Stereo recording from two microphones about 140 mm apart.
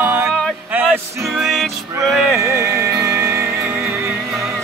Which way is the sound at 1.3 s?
Centre (ahead or behind).